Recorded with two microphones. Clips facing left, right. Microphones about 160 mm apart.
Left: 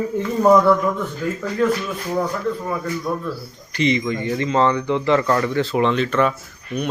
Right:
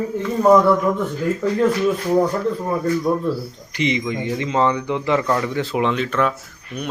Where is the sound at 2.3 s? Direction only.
30° right (ahead or behind).